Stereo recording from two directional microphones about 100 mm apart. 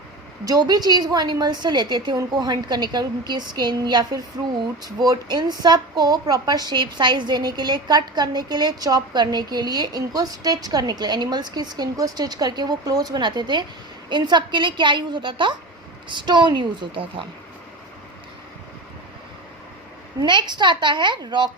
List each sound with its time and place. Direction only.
0.4 s a woman's voice: 40° right (ahead or behind); by 17.2 s 60° right (ahead or behind)
20.2 s a woman's voice: 50° right (ahead or behind)